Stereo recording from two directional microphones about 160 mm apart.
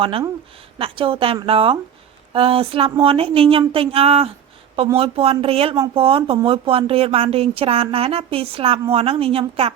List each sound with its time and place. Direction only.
0.0 s speech: 35° right (ahead or behind)